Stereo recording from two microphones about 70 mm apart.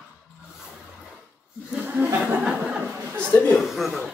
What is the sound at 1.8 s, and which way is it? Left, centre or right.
Speech, right.